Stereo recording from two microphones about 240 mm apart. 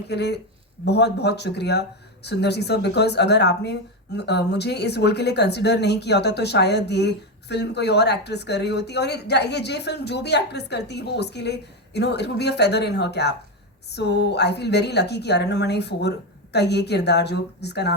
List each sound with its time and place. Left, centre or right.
0.1 s speech: left